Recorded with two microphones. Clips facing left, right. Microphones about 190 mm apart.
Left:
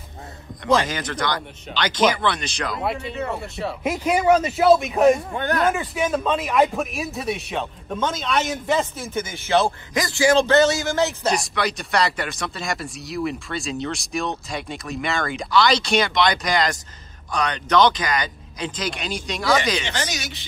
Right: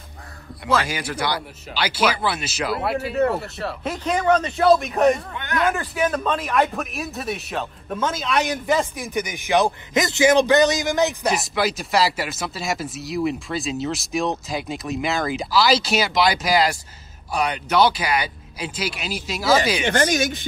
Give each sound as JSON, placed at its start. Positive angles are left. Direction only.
{"t": 0.8, "sound": "speech", "side_deg": -10}
{"t": 3.8, "sound": "speech", "side_deg": 10}
{"t": 5.3, "sound": "speech", "side_deg": 35}
{"t": 5.7, "sound": "speech", "side_deg": 0}
{"t": 8.9, "sound": "speech", "side_deg": -15}
{"t": 11.2, "sound": "speech", "side_deg": -5}
{"t": 19.8, "sound": "speech", "side_deg": -55}